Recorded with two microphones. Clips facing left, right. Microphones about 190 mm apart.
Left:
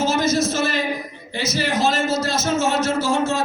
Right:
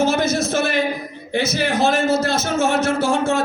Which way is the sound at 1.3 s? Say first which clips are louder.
Right 3 dB; 55° right (ahead or behind).